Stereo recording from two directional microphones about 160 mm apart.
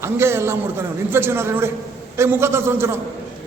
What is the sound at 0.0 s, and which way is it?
A man's voice, 15° right (ahead or behind).